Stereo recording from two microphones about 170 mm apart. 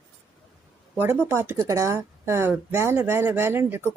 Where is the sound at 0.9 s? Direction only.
10° right (ahead or behind).